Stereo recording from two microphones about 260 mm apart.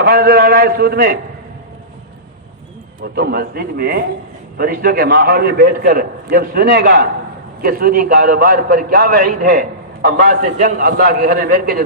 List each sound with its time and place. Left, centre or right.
0.0 s a man's voice: right
3.0 s a man's voice: right